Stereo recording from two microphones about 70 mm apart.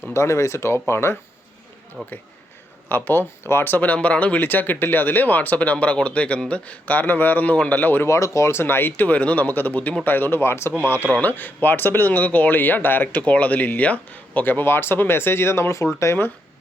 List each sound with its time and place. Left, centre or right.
0.1 s speech: left
2.0 s speech: centre
2.9 s speech: left
8.0 s speech: left
11.1 s speech: left